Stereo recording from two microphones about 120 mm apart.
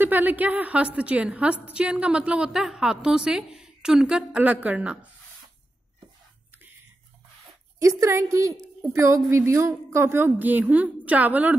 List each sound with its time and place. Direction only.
0.0 s a woman's voice: 15° right (ahead or behind)
7.8 s a woman's voice: 25° right (ahead or behind)